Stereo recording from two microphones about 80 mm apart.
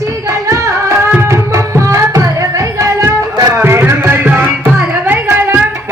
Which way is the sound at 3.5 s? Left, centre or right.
Right.